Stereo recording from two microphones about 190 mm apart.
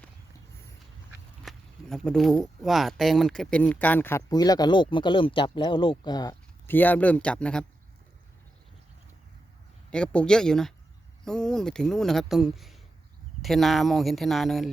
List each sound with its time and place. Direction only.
1.5 s speech: centre (ahead or behind); by 6.7 s 20° left (ahead or behind)
6.7 s speech: 10° left (ahead or behind)
9.9 s speech: 5° left (ahead or behind)